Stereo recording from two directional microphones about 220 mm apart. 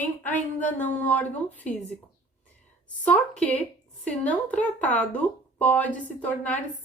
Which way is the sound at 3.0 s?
5° left (ahead or behind).